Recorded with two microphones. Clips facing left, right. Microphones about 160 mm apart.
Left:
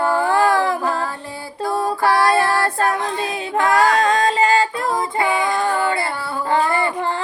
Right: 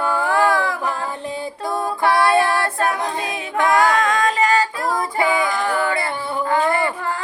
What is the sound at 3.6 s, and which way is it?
Female singing, 35° left (ahead or behind).